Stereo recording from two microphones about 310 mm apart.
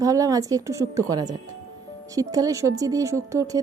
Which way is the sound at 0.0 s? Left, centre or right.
Centre.